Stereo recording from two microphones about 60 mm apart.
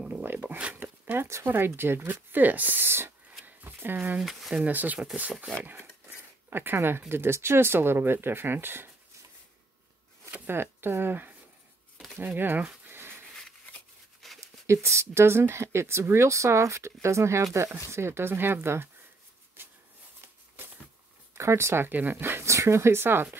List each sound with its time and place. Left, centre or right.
0.1 s speech: right
0.8 s a sound: right
1.1 s speech: right
3.4 s a sound: right
4.2 s speech: centre
4.6 s speech: right
10.4 s speech: right
12.4 s speech: right
12.8 s a sound: right
14.2 s a sound: centre
14.7 s speech: right
21.4 s speech: right
21.8 s speech: right